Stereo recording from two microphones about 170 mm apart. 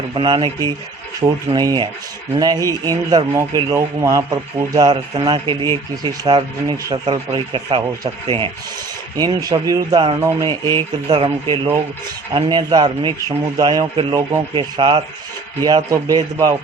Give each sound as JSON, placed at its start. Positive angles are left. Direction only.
{"t": 0.1, "sound": "speech", "side_deg": -25}
{"t": 10.2, "sound": "speech", "side_deg": -15}
{"t": 11.1, "sound": "speech", "side_deg": -30}